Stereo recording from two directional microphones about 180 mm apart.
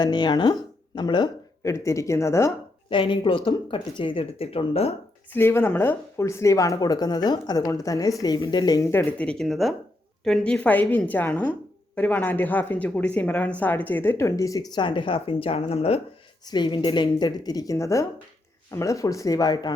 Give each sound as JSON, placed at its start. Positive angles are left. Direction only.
{"t": 0.0, "sound": "speech", "side_deg": 25}
{"t": 2.9, "sound": "speech", "side_deg": 25}
{"t": 5.3, "sound": "speech", "side_deg": 15}